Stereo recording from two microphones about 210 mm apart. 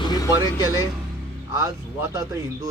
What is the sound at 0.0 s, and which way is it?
Music, 20° left (ahead or behind).